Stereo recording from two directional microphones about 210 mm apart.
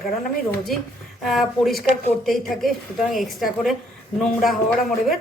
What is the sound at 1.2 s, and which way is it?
A man's voice, centre (ahead or behind).